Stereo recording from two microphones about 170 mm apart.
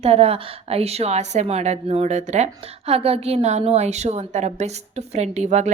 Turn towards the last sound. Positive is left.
turn(degrees=-40)  # may be behind; listen again after turning